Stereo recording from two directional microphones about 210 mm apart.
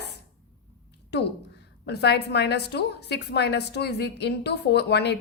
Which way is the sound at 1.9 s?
50° left (ahead or behind).